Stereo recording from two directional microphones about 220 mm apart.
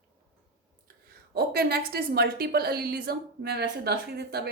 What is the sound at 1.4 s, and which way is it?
A woman's voice, 45° right (ahead or behind).